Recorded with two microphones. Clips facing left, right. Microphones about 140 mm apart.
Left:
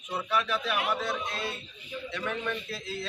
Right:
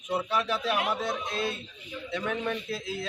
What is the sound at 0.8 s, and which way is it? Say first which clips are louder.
A man's voice: right 1 dB; 15° right (ahead or behind).